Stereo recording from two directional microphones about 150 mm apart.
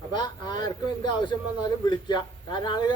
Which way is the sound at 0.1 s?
30° left (ahead or behind).